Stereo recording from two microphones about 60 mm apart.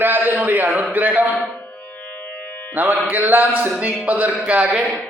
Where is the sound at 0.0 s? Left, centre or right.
Right.